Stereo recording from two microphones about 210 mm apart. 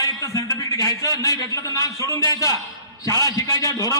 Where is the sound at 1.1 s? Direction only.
15° left (ahead or behind).